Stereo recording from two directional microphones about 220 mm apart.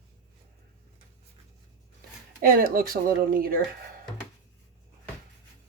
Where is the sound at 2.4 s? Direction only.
40° right (ahead or behind).